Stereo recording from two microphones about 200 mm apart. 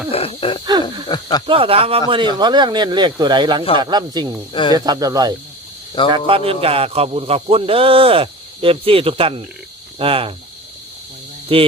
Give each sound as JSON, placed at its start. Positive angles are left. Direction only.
{"t": 0.1, "sound": "wheeze", "side_deg": 30}
{"t": 0.6, "sound": "wild animals", "side_deg": -20}
{"t": 1.0, "sound": "speech", "side_deg": 20}
{"t": 1.5, "sound": "a man's voice", "side_deg": -25}
{"t": 11.5, "sound": "a man's voice", "side_deg": -25}